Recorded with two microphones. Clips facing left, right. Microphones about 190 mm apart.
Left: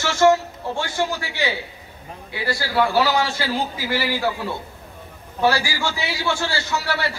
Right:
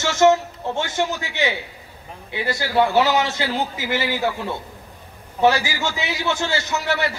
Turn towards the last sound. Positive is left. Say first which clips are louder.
# right 2 dB
turn(degrees=-20)  # may be behind; listen again after turning